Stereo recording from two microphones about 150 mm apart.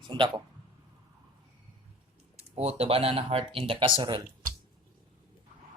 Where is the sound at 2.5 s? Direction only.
45° right (ahead or behind).